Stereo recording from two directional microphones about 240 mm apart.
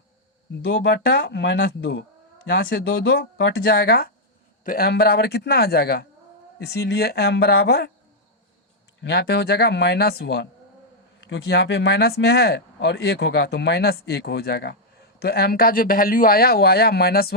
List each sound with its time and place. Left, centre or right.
0.7 s speech: left
9.0 s speech: left